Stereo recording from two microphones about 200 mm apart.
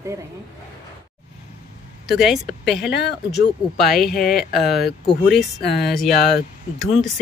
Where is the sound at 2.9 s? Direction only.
55° left (ahead or behind).